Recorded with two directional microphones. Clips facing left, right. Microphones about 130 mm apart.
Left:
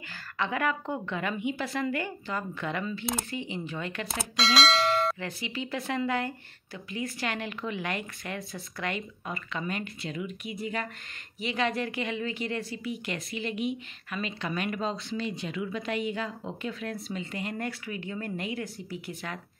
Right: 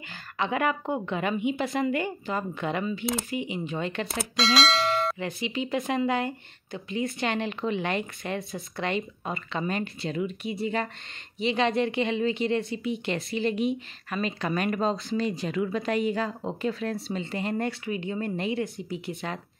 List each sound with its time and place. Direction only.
0.1 s speech: 20° right (ahead or behind)
4.1 s bell: centre (ahead or behind)
5.2 s speech: 20° right (ahead or behind)